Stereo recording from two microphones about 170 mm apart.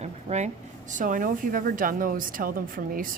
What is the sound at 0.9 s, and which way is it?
Speech, 50° right (ahead or behind).